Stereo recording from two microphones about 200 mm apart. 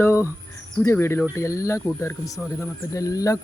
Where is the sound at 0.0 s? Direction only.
15° left (ahead or behind).